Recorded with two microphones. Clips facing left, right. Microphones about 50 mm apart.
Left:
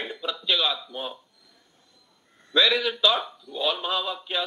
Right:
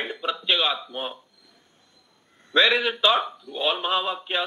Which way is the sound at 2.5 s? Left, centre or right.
Right.